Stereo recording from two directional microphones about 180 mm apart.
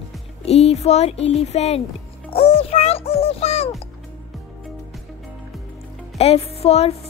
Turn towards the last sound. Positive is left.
turn(degrees=35)  # may be behind; listen again after turning